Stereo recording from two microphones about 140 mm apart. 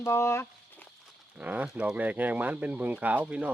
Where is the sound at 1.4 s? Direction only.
10° right (ahead or behind).